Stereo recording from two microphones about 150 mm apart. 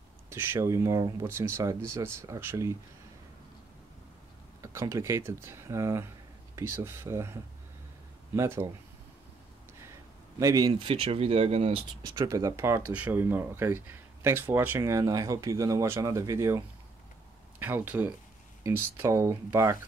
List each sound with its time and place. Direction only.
0.3 s speech: 15° right (ahead or behind)
4.6 s speech: 20° right (ahead or behind)
8.4 s speech: 15° right (ahead or behind)
10.4 s speech: 25° right (ahead or behind); by 11.8 s 45° right (ahead or behind)
12.0 s speech: 25° right (ahead or behind)